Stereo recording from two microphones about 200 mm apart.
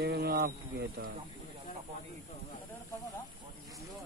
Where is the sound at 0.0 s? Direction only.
55° right (ahead or behind).